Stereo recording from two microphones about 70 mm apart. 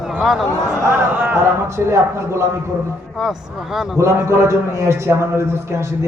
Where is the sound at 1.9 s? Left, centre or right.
Right.